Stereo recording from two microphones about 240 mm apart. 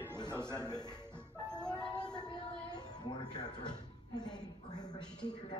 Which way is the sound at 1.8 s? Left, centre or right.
Centre.